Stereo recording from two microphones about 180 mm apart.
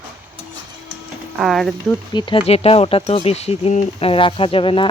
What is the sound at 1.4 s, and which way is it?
Speech, centre (ahead or behind).